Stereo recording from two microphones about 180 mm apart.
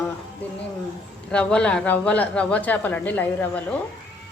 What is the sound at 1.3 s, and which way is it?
Speech, 5° left (ahead or behind).